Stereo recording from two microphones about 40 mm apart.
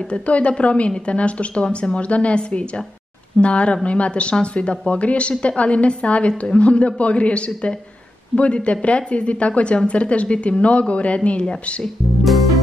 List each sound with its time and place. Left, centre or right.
0.1 s a woman's voice: left
11.8 s speech: centre